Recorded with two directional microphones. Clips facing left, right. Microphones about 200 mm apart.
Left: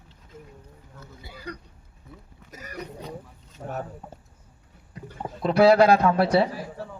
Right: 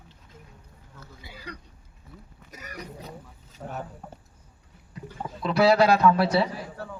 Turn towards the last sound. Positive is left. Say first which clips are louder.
# left 1 dB
turn(degrees=50)  # may be behind; listen again after turning